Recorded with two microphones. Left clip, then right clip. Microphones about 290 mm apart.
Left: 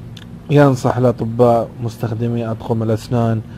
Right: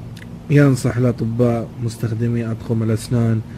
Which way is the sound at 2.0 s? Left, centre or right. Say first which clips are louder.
Left 3 dB; left.